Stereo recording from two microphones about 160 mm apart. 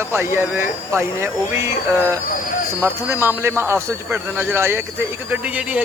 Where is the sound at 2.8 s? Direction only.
15° right (ahead or behind).